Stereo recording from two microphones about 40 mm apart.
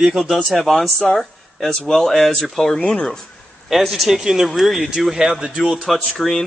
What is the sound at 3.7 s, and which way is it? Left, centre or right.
Speech, centre.